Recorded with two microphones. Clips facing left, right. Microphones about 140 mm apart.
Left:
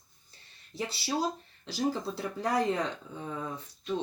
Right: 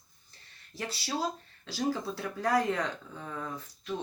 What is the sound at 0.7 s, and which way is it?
Speech, 15° left (ahead or behind).